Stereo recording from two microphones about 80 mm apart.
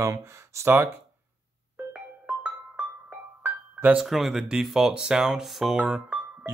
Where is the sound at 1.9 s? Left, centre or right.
Centre.